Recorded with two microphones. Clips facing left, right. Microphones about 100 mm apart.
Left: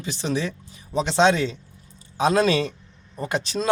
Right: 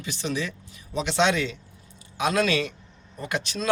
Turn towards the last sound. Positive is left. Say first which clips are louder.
# left 4 dB
turn(degrees=30)  # may be behind; listen again after turning